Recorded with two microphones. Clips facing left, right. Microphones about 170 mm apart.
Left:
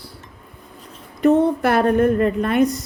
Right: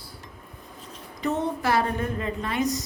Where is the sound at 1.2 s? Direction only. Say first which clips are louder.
Left 12 dB; 60° left (ahead or behind).